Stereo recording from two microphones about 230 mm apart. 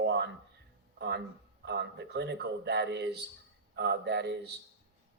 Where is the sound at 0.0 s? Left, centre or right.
Right.